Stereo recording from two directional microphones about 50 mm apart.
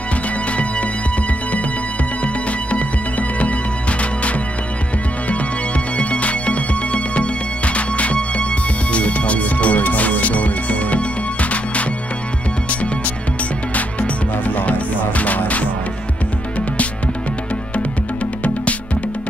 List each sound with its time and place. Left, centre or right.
2.2 s music: left
5.9 s music: left
13.7 s music: left